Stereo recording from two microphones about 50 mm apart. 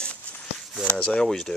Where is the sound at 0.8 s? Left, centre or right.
Centre.